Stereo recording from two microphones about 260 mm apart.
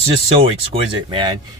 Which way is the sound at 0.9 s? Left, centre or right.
Centre.